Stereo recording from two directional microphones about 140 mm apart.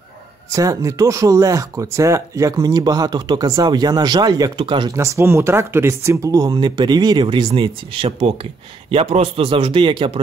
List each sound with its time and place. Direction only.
0.5 s speech: 25° right (ahead or behind)
4.9 s a man's voice: 20° right (ahead or behind); by 10.1 s 35° right (ahead or behind)